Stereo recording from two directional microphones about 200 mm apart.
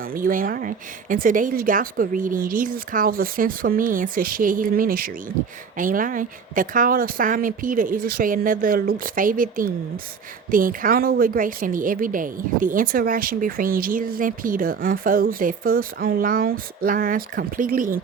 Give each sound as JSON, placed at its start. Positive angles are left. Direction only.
{"t": 0.0, "sound": "a woman's voice", "side_deg": -45}